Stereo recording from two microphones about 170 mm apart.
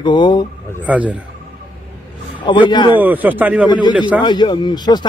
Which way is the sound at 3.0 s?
10° right (ahead or behind).